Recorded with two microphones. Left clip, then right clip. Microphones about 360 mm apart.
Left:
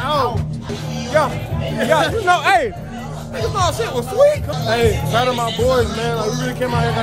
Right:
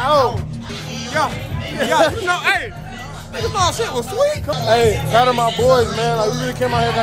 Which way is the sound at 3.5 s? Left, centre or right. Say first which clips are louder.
Right 1 dB; centre.